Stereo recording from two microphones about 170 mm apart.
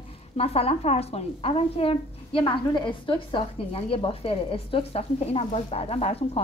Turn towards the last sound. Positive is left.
turn(degrees=35)  # may be behind; listen again after turning